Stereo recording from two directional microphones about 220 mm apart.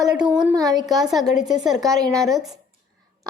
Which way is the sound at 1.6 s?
Centre (ahead or behind).